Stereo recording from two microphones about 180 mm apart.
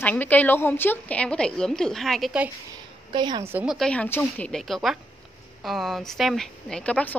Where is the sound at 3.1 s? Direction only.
25° right (ahead or behind).